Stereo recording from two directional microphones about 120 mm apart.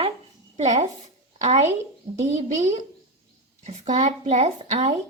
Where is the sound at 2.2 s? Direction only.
75° right (ahead or behind); by 4.9 s 60° right (ahead or behind).